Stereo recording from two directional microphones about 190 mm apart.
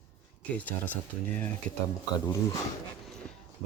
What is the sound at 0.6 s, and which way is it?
Speech, 10° left (ahead or behind).